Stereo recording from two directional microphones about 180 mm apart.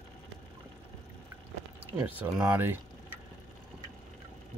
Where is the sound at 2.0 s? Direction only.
15° right (ahead or behind).